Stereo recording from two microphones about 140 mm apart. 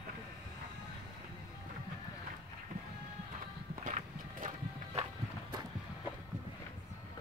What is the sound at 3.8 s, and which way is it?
Horse, 65° right (ahead or behind).